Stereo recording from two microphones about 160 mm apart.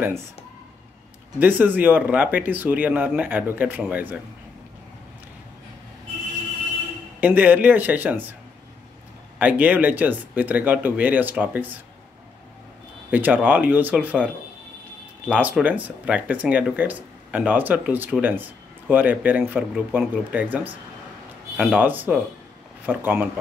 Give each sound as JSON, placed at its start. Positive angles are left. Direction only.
{"t": 1.4, "sound": "speech", "side_deg": -10}
{"t": 7.2, "sound": "speech", "side_deg": -10}
{"t": 9.4, "sound": "speech", "side_deg": -10}
{"t": 13.1, "sound": "speech", "side_deg": -10}